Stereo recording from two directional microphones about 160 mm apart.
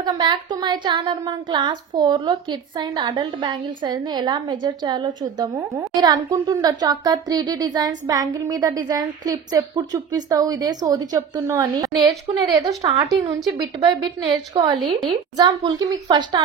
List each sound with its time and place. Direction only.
0.0 s speech: 25° right (ahead or behind)
14.8 s a woman's voice: centre (ahead or behind)
15.3 s speech: 25° right (ahead or behind)